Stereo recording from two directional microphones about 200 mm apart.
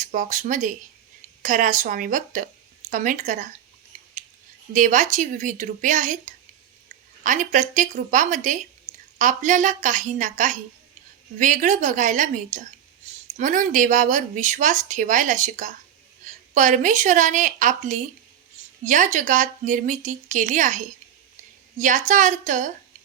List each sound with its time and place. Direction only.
0.0 s speech: 40° right (ahead or behind)
4.7 s speech: 40° right (ahead or behind)